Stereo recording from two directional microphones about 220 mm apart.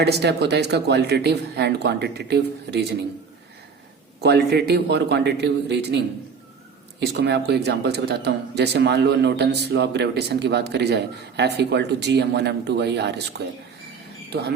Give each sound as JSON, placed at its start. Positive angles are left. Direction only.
{"t": 0.0, "sound": "speech", "side_deg": -50}
{"t": 4.2, "sound": "speech", "side_deg": -50}
{"t": 7.0, "sound": "speech", "side_deg": -50}
{"t": 14.3, "sound": "speech", "side_deg": -50}